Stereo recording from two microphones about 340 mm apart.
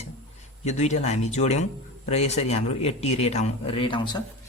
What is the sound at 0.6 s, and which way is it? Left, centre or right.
A man's voice, centre.